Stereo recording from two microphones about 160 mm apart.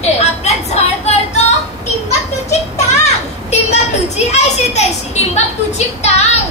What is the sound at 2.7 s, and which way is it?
Children playing, 45° left (ahead or behind).